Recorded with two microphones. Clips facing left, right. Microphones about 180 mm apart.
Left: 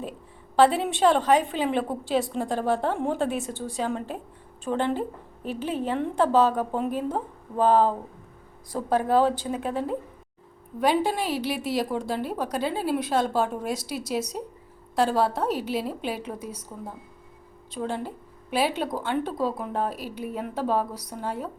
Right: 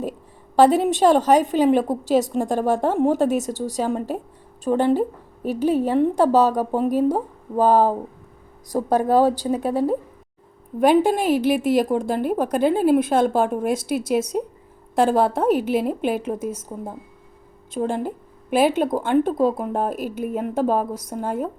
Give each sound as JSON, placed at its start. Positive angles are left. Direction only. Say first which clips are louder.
{"t": 0.5, "sound": "a woman's voice", "louder": "right 5 dB", "side_deg": -40}
{"t": 10.8, "sound": "a woman's voice", "louder": "right 7 dB", "side_deg": -50}